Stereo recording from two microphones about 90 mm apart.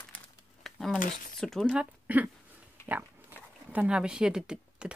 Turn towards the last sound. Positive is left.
turn(degrees=-10)  # may be behind; listen again after turning